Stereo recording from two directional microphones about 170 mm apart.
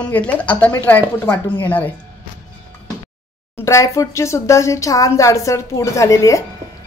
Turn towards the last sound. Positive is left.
turn(degrees=20)  # may be behind; listen again after turning